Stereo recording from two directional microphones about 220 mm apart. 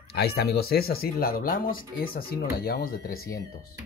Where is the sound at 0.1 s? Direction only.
45° left (ahead or behind).